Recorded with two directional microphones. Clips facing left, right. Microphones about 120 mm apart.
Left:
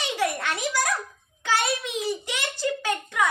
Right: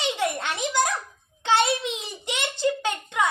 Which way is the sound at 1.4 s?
25° right (ahead or behind).